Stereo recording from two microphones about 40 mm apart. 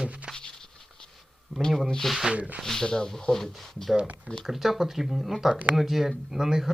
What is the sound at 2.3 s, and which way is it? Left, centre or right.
Speech, right.